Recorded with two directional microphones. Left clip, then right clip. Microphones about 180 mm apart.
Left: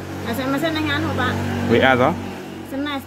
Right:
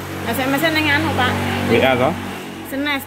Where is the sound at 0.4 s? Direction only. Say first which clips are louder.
Right 5 dB; 15° left (ahead or behind).